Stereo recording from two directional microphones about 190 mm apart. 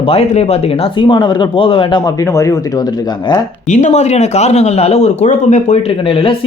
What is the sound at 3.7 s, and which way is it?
A man's voice, 40° left (ahead or behind).